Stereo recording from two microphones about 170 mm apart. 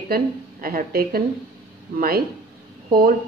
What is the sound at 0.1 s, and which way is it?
A woman's voice, 60° right (ahead or behind).